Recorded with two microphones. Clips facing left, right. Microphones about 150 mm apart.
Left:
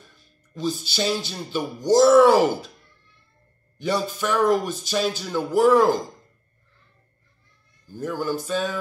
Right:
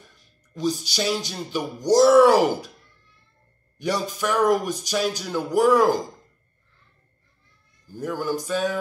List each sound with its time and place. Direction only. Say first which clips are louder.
0.0 s speech: even; 15° right (ahead or behind)
3.7 s speech: left 1 dB; 15° right (ahead or behind)
7.9 s speech: even; 15° right (ahead or behind)